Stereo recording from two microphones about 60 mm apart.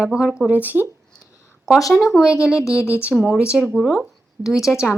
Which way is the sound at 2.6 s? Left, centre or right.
Left.